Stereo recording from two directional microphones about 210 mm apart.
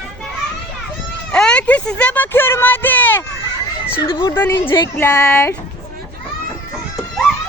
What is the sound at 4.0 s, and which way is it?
Speech, 25° left (ahead or behind).